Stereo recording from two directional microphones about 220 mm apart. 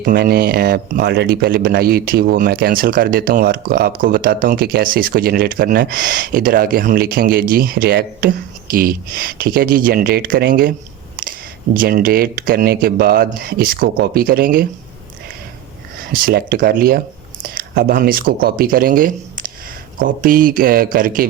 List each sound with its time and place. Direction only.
0.0 s speech: 45° right (ahead or behind)
16.2 s speech: 40° right (ahead or behind)